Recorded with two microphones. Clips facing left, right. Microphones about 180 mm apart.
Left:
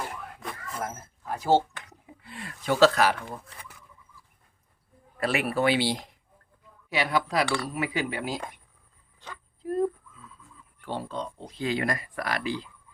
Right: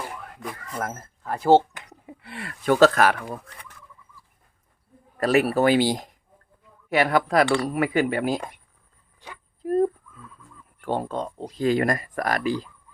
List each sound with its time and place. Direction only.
0.8 s speech: 70° right (ahead or behind)
2.2 s speech: 70° right (ahead or behind); by 3.2 s 50° right (ahead or behind)
5.2 s speech: 40° right (ahead or behind)
9.2 s speech: 15° right (ahead or behind)
9.6 s fowl: 50° right (ahead or behind)
10.8 s speech: 50° right (ahead or behind)